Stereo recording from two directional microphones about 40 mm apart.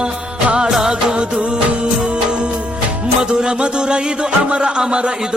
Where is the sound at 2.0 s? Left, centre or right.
Right.